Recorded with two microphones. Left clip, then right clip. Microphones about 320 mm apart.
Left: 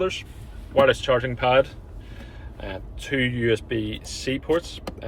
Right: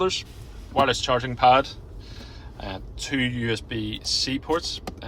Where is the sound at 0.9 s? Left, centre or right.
Right.